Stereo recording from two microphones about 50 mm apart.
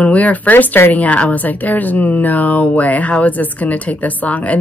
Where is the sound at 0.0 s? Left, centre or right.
Left.